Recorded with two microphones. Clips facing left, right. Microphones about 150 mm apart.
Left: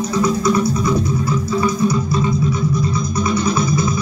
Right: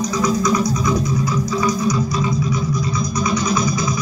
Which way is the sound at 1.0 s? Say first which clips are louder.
Left 1 dB; 30° left (ahead or behind).